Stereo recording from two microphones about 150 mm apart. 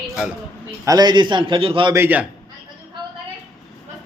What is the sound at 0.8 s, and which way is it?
A man's voice, 25° right (ahead or behind).